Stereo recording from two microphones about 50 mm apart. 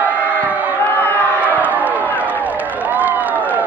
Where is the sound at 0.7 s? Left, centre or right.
Left.